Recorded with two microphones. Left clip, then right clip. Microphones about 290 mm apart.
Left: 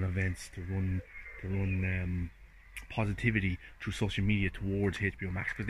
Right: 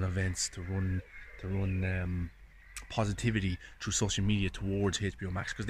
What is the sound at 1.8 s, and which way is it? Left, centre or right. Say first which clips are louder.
Speech: right 1 dB; right.